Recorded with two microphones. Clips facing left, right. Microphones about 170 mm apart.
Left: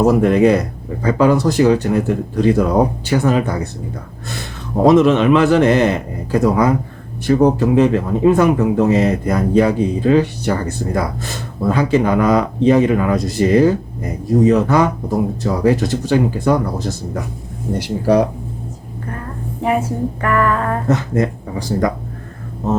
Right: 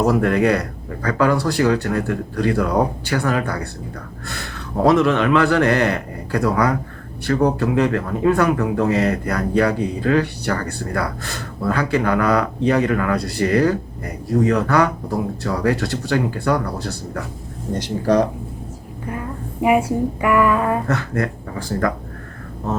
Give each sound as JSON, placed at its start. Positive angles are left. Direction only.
{"t": 0.0, "sound": "speech", "side_deg": 15}
{"t": 19.6, "sound": "a woman's voice", "side_deg": -10}
{"t": 20.8, "sound": "speech", "side_deg": 20}